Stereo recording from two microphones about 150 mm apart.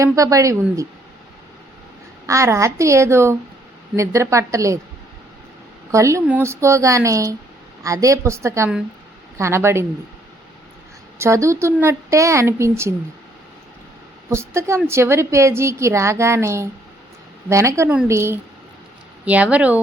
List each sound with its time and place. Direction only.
0.0 s a woman's voice: 20° right (ahead or behind)
2.2 s a woman's voice: 20° right (ahead or behind)
5.9 s a woman's voice: 20° right (ahead or behind)
11.2 s a woman's voice: 20° right (ahead or behind)
14.3 s a woman's voice: 20° right (ahead or behind)